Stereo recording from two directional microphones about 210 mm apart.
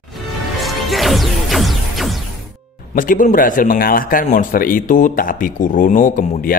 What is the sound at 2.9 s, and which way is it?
Speech, 40° left (ahead or behind).